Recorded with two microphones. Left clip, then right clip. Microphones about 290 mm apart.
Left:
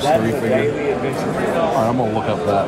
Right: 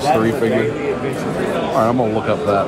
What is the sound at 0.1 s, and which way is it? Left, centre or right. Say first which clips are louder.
Speech: right 2 dB; centre.